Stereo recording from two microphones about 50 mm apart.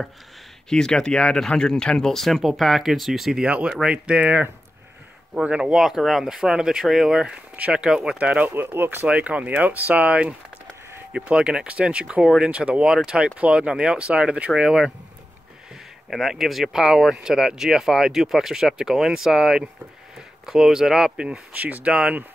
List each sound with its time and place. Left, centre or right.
0.7 s speech: centre
3.4 s speech: right
5.6 s speech: centre
8.2 s speech: right
8.5 s speech: right
9.0 s speech: right
16.1 s speech: centre
21.5 s speech: right
21.8 s speech: centre